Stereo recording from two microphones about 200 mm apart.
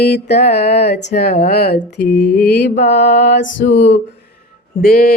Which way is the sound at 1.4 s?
50° left (ahead or behind).